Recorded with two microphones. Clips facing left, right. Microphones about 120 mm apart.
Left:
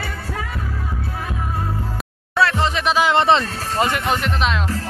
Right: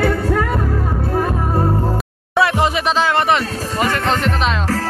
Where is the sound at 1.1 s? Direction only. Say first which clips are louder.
Right 10 dB; 45° right (ahead or behind).